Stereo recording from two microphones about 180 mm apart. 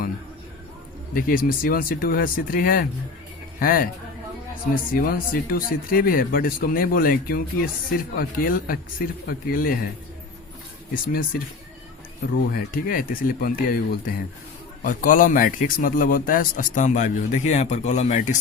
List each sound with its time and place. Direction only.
1.1 s speech: 50° left (ahead or behind)
10.9 s speech: 50° left (ahead or behind)
12.5 s speech: 50° left (ahead or behind)